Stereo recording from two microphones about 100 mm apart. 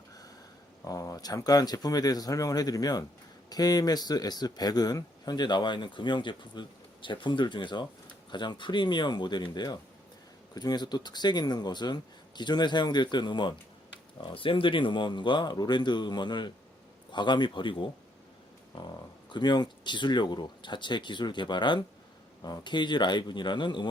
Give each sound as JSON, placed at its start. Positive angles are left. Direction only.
{"t": 0.9, "sound": "speech", "side_deg": 35}
{"t": 19.3, "sound": "speech", "side_deg": 50}